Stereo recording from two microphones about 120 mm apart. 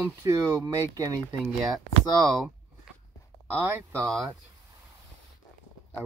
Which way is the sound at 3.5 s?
25° right (ahead or behind).